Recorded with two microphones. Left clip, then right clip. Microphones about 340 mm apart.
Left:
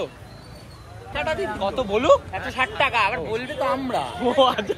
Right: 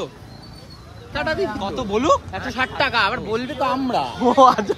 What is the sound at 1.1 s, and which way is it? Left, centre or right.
Speech, right.